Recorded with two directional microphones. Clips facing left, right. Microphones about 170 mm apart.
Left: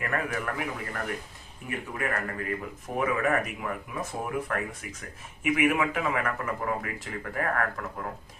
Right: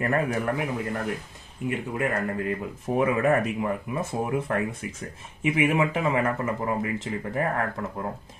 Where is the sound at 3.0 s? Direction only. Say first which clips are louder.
Right 4 dB; 30° right (ahead or behind).